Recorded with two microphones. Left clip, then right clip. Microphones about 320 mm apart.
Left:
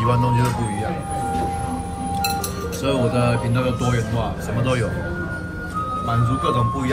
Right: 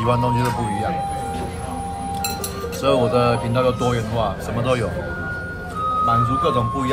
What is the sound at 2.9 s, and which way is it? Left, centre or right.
Speech, centre.